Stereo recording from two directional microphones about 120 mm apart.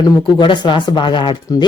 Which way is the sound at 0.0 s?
40° left (ahead or behind).